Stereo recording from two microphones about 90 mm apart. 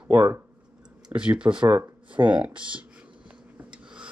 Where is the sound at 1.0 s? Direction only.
10° right (ahead or behind).